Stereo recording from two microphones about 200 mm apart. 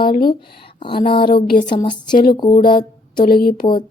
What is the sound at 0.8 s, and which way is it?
Speech, 25° left (ahead or behind).